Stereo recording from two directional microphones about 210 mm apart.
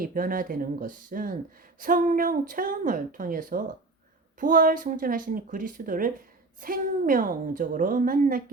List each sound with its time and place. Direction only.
0.0 s speech: 40° right (ahead or behind)